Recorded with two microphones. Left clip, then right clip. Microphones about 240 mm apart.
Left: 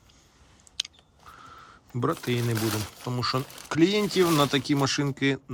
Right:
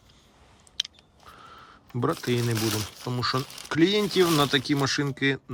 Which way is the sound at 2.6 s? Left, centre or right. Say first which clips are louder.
Right 1 dB; centre.